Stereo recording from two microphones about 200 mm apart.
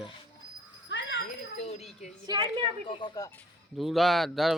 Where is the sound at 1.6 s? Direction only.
35° left (ahead or behind).